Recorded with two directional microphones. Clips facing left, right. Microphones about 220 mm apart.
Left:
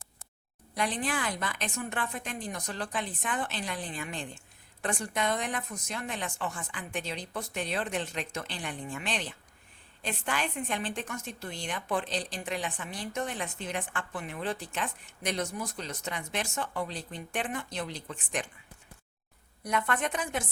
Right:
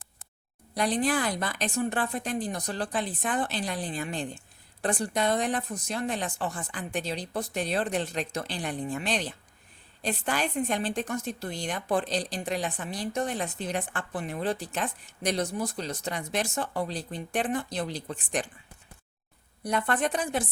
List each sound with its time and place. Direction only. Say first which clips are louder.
0.7 s a woman's voice: right 6 dB; 35° right (ahead or behind)
19.6 s a woman's voice: right 3 dB; 35° right (ahead or behind)